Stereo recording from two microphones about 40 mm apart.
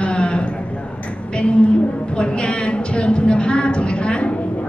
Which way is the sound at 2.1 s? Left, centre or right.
Left.